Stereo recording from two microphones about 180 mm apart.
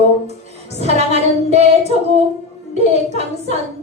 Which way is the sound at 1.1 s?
35° right (ahead or behind).